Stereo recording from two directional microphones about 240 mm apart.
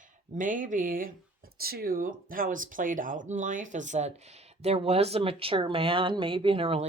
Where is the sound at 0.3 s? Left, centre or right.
Right.